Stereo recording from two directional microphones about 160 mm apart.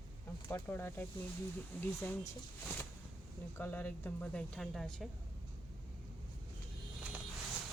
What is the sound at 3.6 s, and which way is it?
Speech, 10° left (ahead or behind).